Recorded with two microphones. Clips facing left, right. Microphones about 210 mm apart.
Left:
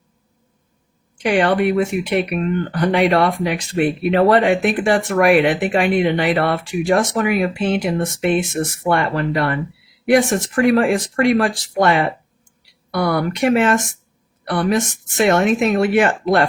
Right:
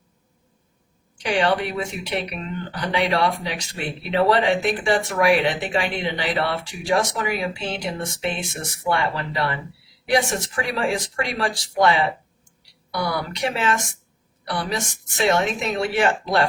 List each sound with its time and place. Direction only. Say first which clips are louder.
1.2 s speech: left 6 dB; 55° left (ahead or behind)